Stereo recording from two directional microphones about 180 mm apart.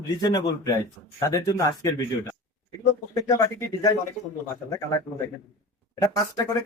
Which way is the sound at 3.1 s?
20° left (ahead or behind).